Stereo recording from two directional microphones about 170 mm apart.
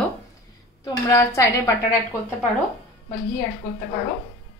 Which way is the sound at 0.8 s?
20° left (ahead or behind).